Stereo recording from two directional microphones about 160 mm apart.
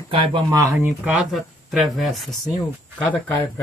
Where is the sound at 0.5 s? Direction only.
20° right (ahead or behind).